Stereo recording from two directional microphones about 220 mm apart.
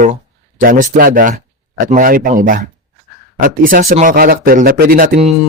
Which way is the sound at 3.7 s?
40° right (ahead or behind).